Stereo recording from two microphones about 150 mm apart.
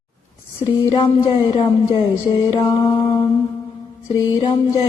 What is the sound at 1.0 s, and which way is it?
Mantra, 35° left (ahead or behind).